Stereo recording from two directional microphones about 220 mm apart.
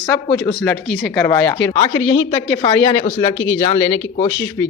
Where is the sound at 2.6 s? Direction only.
20° left (ahead or behind).